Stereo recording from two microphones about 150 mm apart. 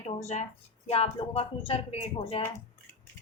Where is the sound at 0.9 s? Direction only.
40° left (ahead or behind).